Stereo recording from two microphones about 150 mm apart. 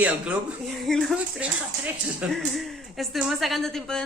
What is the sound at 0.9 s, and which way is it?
Speech, 5° left (ahead or behind).